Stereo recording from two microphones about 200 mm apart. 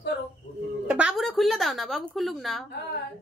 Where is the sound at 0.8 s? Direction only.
5° right (ahead or behind).